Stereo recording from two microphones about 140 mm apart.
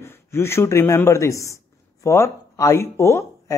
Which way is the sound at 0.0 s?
15° left (ahead or behind).